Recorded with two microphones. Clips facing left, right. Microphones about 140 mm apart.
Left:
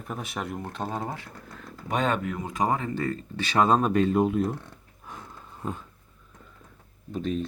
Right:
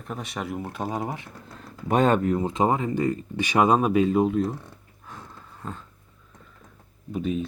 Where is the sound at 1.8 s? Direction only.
45° right (ahead or behind); by 4.6 s centre (ahead or behind).